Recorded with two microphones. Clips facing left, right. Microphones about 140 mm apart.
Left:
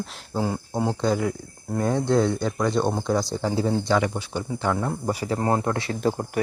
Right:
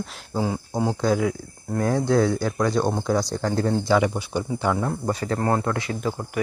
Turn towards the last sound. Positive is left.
turn(degrees=40)  # may be behind; listen again after turning